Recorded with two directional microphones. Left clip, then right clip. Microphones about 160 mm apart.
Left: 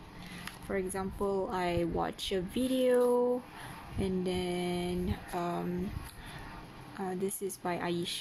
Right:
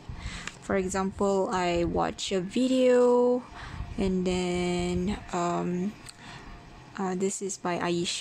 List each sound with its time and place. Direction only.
0.3 s a woman's voice: 45° right (ahead or behind)
7.0 s a woman's voice: 35° right (ahead or behind)